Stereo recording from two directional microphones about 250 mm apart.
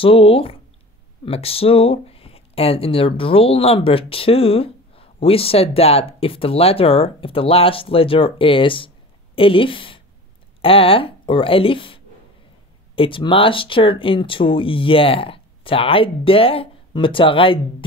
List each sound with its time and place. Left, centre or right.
0.0 s speech: left